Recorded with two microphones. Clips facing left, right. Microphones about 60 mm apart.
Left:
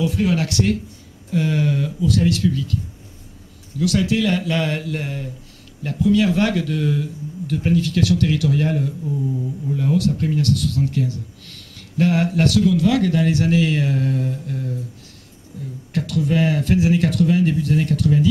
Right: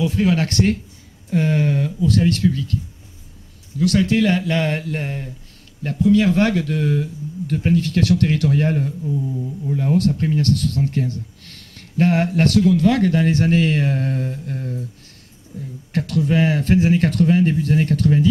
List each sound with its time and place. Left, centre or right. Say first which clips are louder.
0.0 s speech: right 1 dB; right
3.8 s speech: right 2 dB; right
15.9 s speech: right 1 dB; right